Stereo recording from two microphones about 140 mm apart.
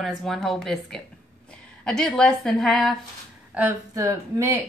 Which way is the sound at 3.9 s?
20° right (ahead or behind).